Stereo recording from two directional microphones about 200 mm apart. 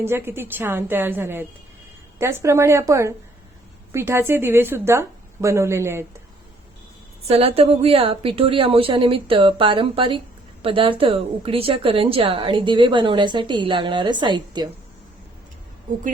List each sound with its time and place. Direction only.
0.0 s a woman's voice: 10° right (ahead or behind)
7.3 s a woman's voice: 30° right (ahead or behind)